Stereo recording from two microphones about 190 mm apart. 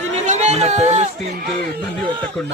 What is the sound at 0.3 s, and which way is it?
Chatter, 35° right (ahead or behind).